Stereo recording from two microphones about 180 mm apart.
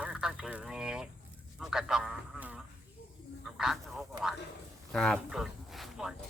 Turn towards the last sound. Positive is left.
turn(degrees=0)  # may be behind; listen again after turning